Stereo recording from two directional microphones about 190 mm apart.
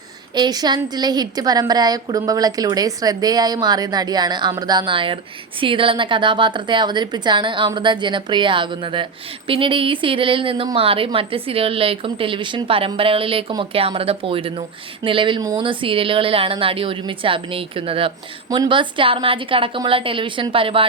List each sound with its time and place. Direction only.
0.3 s a woman's voice: 20° right (ahead or behind)